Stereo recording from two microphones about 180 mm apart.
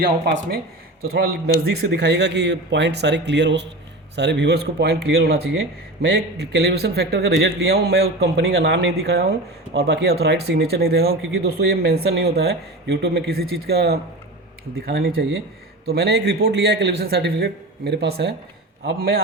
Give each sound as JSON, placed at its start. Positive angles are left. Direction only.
{"t": 1.7, "sound": "speech", "side_deg": -70}
{"t": 18.9, "sound": "speech", "side_deg": -55}